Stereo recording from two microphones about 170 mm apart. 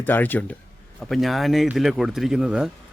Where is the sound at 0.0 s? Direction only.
10° left (ahead or behind).